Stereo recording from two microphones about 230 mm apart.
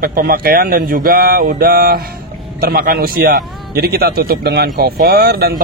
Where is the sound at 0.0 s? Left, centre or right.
Right.